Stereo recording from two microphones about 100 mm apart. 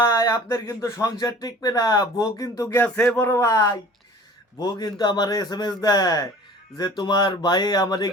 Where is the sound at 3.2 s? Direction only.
25° left (ahead or behind).